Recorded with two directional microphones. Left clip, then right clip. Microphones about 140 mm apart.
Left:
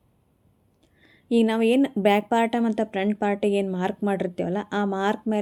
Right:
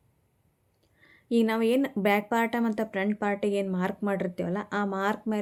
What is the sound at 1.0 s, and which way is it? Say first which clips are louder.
Speech: left 4 dB; 30° left (ahead or behind).